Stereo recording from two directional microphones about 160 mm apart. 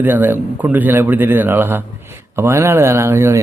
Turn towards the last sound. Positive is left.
turn(degrees=-15)  # may be behind; listen again after turning